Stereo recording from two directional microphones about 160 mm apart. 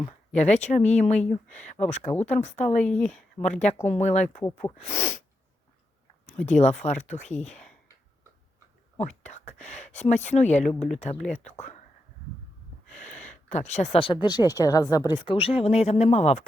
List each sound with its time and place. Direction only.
0.3 s speech: 45° left (ahead or behind)
2.8 s speech: 5° left (ahead or behind)
3.4 s speech: 45° left (ahead or behind)
4.6 s speech: 15° left (ahead or behind)
6.2 s a sound: 45° left (ahead or behind)
6.6 s speech: 45° left (ahead or behind)
9.0 s speech: 45° left (ahead or behind)
12.9 s a sound: 50° left (ahead or behind)
13.9 s speech: 30° left (ahead or behind)
15.3 s speech: 35° left (ahead or behind)